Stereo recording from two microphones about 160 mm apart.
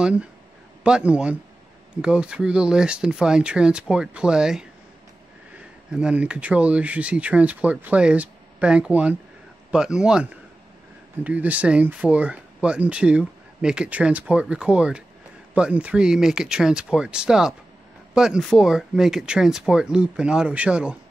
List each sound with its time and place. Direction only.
0.0 s speech: 10° right (ahead or behind)
5.9 s speech: 5° right (ahead or behind)